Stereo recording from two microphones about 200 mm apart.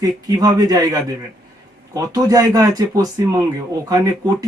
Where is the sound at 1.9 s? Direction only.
20° right (ahead or behind).